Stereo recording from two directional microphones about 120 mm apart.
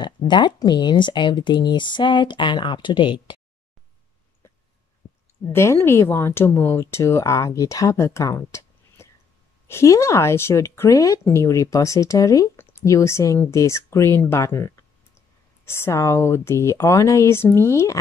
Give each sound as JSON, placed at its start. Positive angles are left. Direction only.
{"t": 0.0, "sound": "speech", "side_deg": 40}
{"t": 5.5, "sound": "speech", "side_deg": 20}